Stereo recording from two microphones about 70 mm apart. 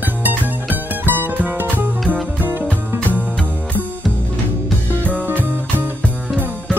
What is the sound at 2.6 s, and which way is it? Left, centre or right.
Music, left.